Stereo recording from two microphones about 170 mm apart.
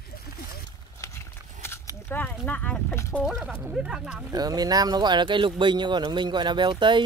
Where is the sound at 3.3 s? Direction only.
5° right (ahead or behind).